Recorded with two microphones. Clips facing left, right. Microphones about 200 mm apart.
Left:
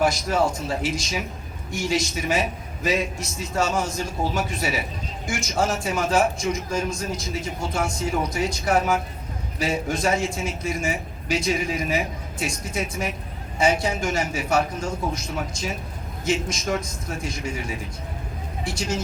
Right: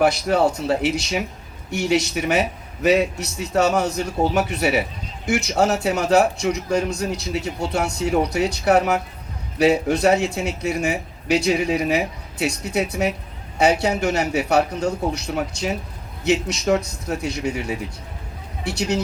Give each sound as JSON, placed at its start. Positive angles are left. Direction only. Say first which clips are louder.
{"t": 0.0, "sound": "a man's voice", "louder": "right 4 dB", "side_deg": -65}